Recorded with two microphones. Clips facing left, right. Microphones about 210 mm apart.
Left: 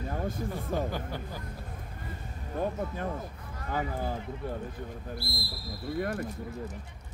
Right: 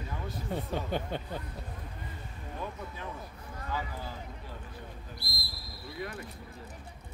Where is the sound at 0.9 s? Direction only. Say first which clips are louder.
Right 2 dB; 25° right (ahead or behind).